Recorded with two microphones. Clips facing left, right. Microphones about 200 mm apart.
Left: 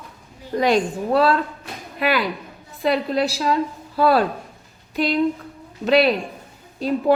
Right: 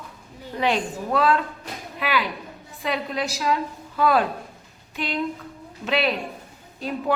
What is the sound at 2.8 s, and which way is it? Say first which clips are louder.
A woman's voice: left 7 dB; 35° left (ahead or behind).